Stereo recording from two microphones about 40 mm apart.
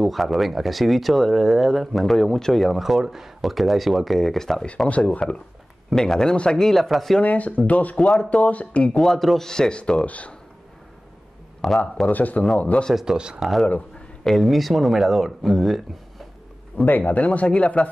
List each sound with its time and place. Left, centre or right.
0.0 s speech: centre
4.8 s speech: left
5.9 s a man's voice: centre
6.3 s speech: left
6.6 s speech: centre
7.2 s speech: left
8.9 s a man's voice: centre
9.5 s a man's voice: centre
10.0 s speech: left
11.6 s speech: centre
12.1 s speech: left
12.9 s speech: centre
13.4 s speech: centre
17.0 s speech: left